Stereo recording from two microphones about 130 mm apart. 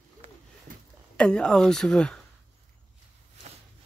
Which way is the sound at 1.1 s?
5° left (ahead or behind).